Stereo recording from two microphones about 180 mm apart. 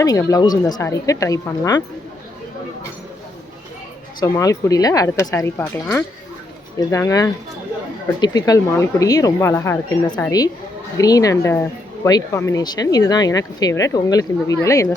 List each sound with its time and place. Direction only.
0.0 s speech: 20° left (ahead or behind)
4.2 s a woman's voice: 20° left (ahead or behind)